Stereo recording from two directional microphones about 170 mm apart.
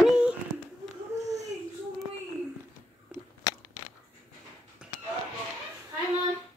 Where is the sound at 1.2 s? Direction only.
20° right (ahead or behind).